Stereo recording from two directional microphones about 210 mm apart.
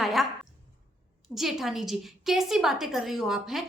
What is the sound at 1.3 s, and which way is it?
A woman's voice, centre (ahead or behind).